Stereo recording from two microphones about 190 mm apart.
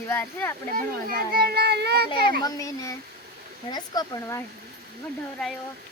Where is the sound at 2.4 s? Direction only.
20° left (ahead or behind).